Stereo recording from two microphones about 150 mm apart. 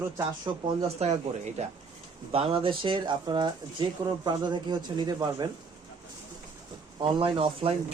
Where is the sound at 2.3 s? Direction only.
35° right (ahead or behind).